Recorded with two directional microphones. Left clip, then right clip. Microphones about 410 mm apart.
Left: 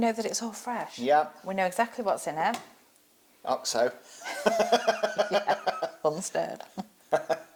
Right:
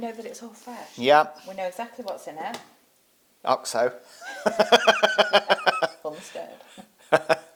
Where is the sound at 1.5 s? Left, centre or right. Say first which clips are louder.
Left 3 dB; left.